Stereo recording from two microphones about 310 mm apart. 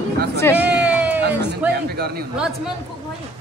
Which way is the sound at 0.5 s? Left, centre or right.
Centre.